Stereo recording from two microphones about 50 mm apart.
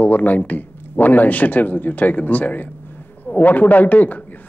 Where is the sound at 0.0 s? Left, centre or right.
Left.